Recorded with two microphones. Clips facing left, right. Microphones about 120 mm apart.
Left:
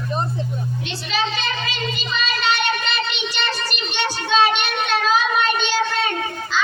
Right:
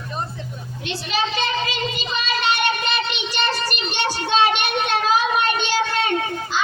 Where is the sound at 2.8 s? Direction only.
45° right (ahead or behind).